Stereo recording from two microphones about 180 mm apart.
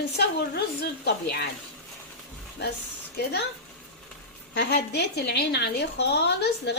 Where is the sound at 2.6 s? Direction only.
65° left (ahead or behind).